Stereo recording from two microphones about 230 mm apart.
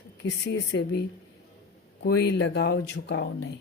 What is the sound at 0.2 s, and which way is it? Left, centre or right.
Speech, left.